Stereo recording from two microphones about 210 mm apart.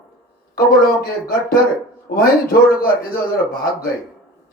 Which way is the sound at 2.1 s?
45° left (ahead or behind).